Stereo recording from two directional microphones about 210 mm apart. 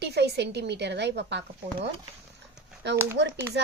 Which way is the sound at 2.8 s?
55° right (ahead or behind).